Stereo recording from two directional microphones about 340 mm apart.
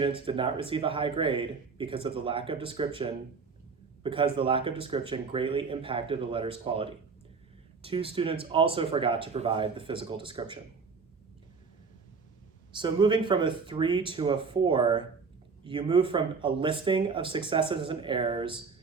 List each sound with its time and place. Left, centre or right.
0.3 s a man's voice: centre
12.7 s speech: centre